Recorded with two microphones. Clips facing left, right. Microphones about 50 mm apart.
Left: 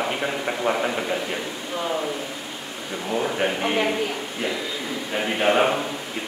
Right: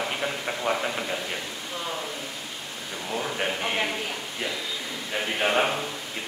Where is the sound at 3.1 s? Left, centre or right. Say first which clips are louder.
Left 5 dB; centre.